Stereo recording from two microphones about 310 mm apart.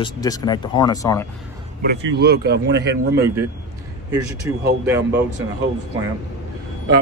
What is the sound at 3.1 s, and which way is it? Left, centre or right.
Speech, centre.